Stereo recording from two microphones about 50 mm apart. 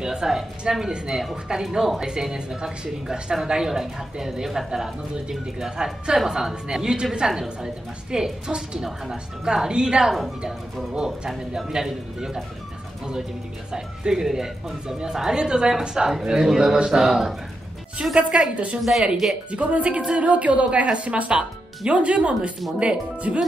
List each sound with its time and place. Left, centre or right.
0.0 s a woman's voice: centre
13.7 s a woman's voice: centre
18.8 s a woman's voice: centre
19.5 s a woman's voice: right